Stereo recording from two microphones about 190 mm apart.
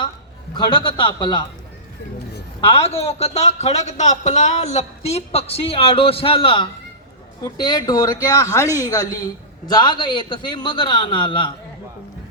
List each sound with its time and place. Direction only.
0.5 s a man's voice: 25° left (ahead or behind)
2.6 s a man's voice: 30° left (ahead or behind)